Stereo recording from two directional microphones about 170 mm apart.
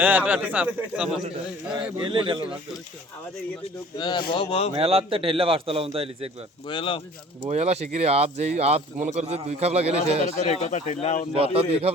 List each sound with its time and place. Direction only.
0.0 s a man's voice: 10° right (ahead or behind)
1.7 s a man's voice: 30° right (ahead or behind)
3.9 s speech: 25° left (ahead or behind)
4.7 s speech: 35° right (ahead or behind)
6.7 s speech: 30° left (ahead or behind)
7.4 s speech: 40° right (ahead or behind)
10.2 s speech: 45° left (ahead or behind)
11.3 s speech: 35° right (ahead or behind)